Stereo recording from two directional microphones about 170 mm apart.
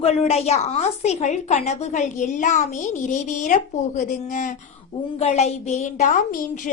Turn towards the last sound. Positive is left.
turn(degrees=50)  # may be behind; listen again after turning